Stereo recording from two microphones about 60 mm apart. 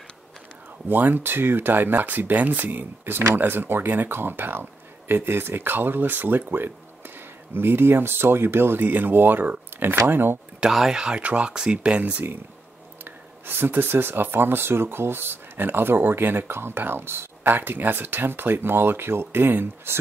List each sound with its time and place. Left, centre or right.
0.8 s speech: right
10.6 s speech: centre
13.0 s speech: right